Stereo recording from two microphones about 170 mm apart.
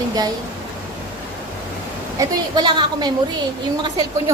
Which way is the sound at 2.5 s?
25° right (ahead or behind).